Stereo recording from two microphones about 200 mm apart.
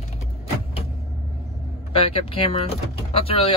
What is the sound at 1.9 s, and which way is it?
Speech, 25° left (ahead or behind).